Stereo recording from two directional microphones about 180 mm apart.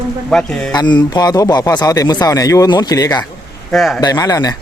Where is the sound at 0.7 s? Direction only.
25° left (ahead or behind).